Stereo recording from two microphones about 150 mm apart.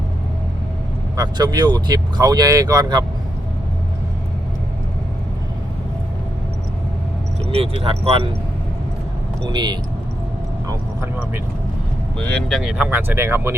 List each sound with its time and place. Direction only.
1.1 s speech: 25° right (ahead or behind)
7.5 s speech: 40° right (ahead or behind)
9.4 s speech: 30° right (ahead or behind)
12.2 s speech: 5° left (ahead or behind); by 13.5 s 15° right (ahead or behind)